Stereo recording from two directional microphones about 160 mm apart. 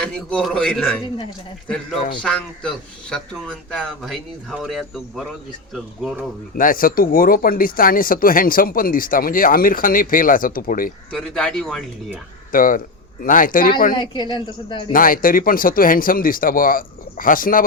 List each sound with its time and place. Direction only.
0.0 s speech: 5° left (ahead or behind)
2.2 s speech: 5° left (ahead or behind)
6.6 s speech: 60° left (ahead or behind)
11.1 s speech: 5° left (ahead or behind)
12.5 s speech: 60° left (ahead or behind)
13.9 s a woman's voice: 30° left (ahead or behind)
14.9 s speech: 60° left (ahead or behind)